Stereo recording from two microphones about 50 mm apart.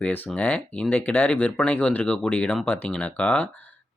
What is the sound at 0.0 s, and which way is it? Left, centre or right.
Speech, left.